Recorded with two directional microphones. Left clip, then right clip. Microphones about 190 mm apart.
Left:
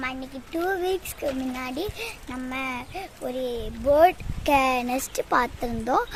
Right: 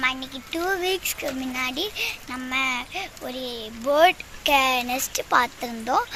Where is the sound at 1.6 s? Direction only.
40° left (ahead or behind).